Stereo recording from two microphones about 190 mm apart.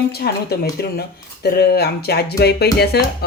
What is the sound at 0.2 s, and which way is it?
Music, 55° left (ahead or behind).